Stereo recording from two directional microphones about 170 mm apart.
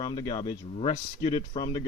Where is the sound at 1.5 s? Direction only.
25° left (ahead or behind).